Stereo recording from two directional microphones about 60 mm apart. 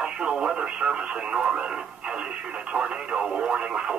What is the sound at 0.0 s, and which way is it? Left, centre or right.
Speech, centre.